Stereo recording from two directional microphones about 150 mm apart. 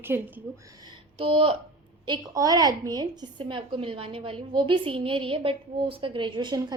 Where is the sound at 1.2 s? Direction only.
40° right (ahead or behind).